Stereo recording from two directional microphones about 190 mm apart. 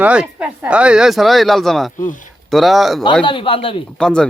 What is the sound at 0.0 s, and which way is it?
Speech, 5° right (ahead or behind).